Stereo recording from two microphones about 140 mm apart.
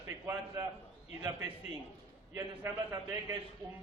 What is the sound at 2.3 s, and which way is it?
A man's voice, 20° right (ahead or behind).